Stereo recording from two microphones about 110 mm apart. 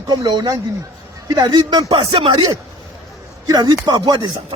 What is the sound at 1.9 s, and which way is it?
Speech, 50° right (ahead or behind).